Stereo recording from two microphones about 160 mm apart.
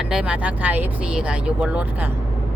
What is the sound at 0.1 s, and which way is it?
Speech, 5° right (ahead or behind).